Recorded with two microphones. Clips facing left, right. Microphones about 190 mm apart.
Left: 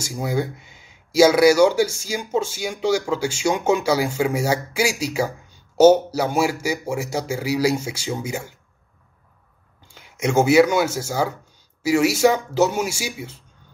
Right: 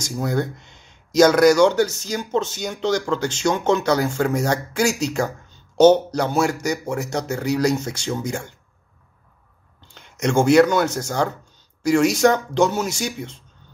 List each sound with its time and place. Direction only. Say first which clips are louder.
0.0 s speech: right 1 dB; 5° left (ahead or behind)
9.8 s a man's voice: even; 10° left (ahead or behind)